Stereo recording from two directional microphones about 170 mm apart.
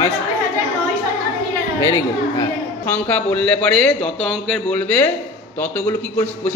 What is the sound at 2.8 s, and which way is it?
A man's voice, 10° left (ahead or behind).